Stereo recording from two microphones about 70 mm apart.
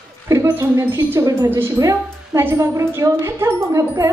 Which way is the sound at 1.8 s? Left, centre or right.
Right.